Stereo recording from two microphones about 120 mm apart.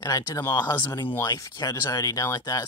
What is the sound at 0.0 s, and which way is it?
Speech, 30° left (ahead or behind).